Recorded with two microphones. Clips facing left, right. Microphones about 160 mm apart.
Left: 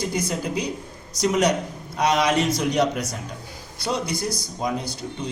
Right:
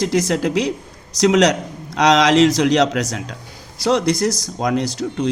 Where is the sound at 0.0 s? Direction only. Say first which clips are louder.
Right 8 dB; 90° right.